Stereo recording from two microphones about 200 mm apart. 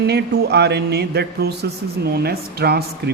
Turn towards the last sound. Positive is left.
turn(degrees=-55)  # may be behind; listen again after turning